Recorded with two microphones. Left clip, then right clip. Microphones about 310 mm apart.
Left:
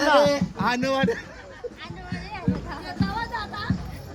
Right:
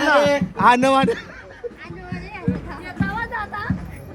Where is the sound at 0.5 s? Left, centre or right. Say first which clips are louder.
Right 11 dB; centre.